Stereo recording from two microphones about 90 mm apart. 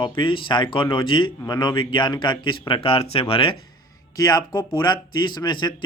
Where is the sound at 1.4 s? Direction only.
55° left (ahead or behind); by 3.6 s 90° left.